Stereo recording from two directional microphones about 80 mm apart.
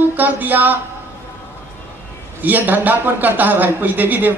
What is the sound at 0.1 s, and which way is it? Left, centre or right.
Speech, right.